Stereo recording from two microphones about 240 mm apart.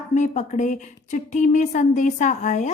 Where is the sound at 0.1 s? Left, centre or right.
Left.